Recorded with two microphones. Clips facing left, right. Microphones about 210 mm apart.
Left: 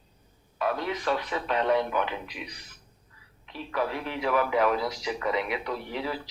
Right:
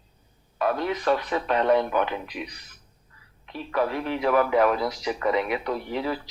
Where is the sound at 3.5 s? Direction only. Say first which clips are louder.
Right 4 dB; 50° right (ahead or behind).